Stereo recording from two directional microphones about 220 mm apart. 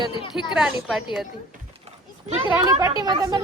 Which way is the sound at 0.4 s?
5° right (ahead or behind).